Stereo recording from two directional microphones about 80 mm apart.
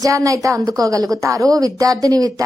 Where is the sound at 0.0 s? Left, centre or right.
Right.